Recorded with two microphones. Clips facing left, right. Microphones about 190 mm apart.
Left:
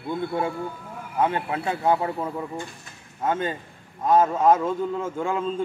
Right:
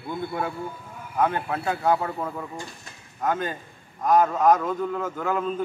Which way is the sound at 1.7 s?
25° left (ahead or behind).